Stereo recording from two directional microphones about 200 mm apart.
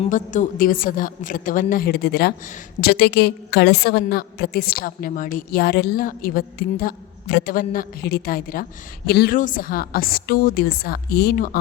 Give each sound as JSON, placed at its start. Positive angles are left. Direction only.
{"t": 0.0, "sound": "a woman's voice", "side_deg": 40}